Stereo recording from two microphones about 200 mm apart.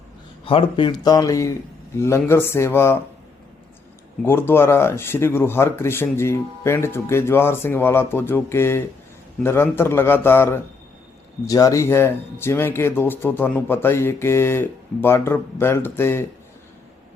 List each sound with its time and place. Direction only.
0.4 s speech: 25° left (ahead or behind)
4.3 s speech: 10° left (ahead or behind)